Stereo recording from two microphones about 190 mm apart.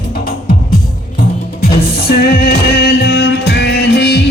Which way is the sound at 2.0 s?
55° left (ahead or behind).